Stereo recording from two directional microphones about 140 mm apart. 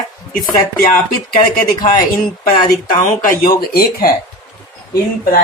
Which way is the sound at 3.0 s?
80° left.